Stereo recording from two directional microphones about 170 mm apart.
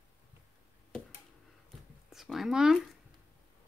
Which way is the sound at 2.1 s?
Centre (ahead or behind).